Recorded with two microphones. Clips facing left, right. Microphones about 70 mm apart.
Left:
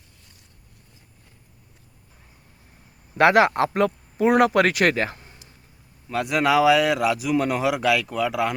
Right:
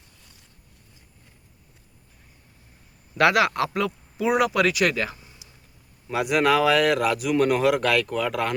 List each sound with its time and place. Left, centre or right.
3.2 s speech: left
5.1 s a sound: left
6.1 s speech: centre